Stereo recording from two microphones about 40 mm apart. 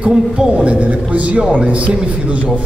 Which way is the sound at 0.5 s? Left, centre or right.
Right.